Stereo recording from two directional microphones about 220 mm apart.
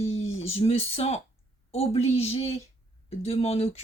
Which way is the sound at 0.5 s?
25° left (ahead or behind).